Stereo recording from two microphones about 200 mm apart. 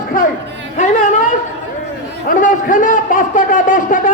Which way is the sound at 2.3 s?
40° left (ahead or behind).